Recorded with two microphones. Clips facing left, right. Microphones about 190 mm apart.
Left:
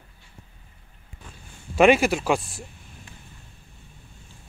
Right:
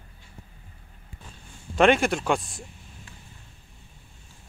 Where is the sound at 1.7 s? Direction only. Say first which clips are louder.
Left 3 dB; 5° left (ahead or behind).